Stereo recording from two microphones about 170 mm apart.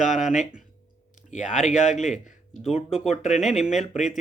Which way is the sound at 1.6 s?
45° left (ahead or behind).